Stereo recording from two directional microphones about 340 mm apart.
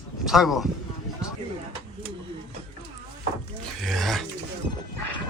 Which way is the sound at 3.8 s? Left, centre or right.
Centre.